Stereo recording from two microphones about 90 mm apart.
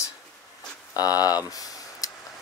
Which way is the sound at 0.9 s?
45° left (ahead or behind).